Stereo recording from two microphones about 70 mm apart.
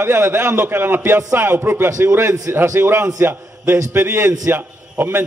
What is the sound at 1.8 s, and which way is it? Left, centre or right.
A man's voice, right.